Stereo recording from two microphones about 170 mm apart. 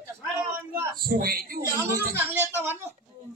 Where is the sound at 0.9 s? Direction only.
60° right (ahead or behind).